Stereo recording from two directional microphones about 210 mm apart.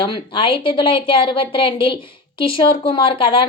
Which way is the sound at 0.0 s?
25° left (ahead or behind).